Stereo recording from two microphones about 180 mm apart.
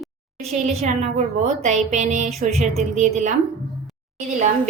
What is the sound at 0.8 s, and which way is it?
A woman's voice, 40° right (ahead or behind).